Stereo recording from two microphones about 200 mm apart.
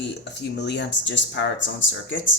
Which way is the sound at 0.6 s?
60° left (ahead or behind).